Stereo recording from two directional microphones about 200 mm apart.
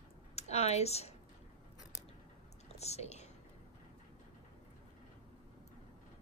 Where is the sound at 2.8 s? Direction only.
30° left (ahead or behind).